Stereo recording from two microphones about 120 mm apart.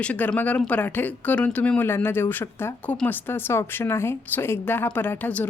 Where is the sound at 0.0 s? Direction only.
10° left (ahead or behind).